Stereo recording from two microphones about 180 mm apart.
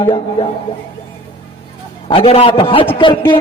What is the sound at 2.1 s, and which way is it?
Speech, 30° left (ahead or behind).